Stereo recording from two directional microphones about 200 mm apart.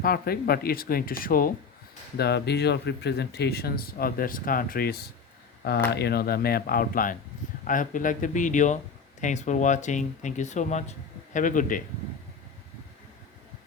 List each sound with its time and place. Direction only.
0.0 s speech: 50° left (ahead or behind)